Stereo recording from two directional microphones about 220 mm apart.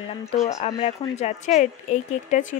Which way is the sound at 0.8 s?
30° left (ahead or behind).